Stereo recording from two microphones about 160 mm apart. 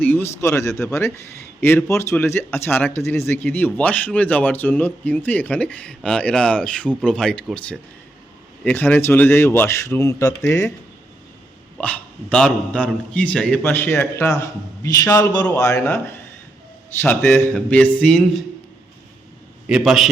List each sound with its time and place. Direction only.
0.0 s speech: 15° left (ahead or behind)
11.8 s a man's voice: 5° left (ahead or behind)
19.6 s a man's voice: 5° right (ahead or behind)